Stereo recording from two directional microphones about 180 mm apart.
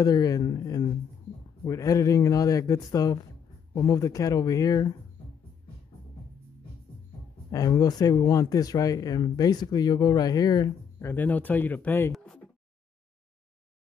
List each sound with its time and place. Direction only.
0.0 s speech: 20° left (ahead or behind)
7.5 s speech: 20° left (ahead or behind)